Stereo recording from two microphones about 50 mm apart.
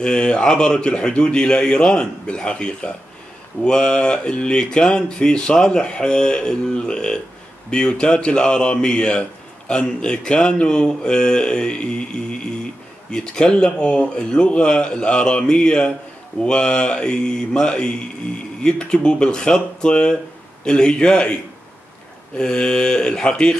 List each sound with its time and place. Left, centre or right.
0.0 s speech: centre
22.4 s speech: centre